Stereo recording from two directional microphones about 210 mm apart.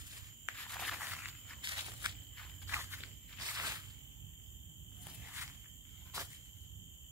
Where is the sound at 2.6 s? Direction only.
10° right (ahead or behind).